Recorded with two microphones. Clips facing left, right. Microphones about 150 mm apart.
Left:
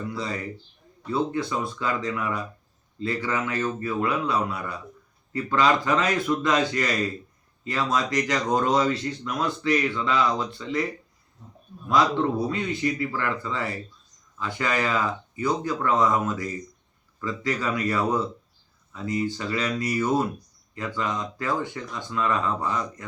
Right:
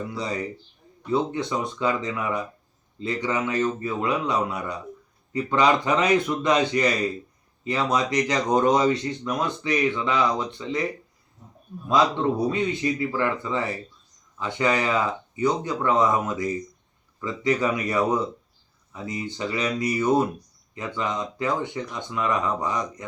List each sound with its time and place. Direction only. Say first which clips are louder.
0.1 s speech: right 2 dB; 20° right (ahead or behind)
11.9 s speech: right 1 dB; 20° right (ahead or behind)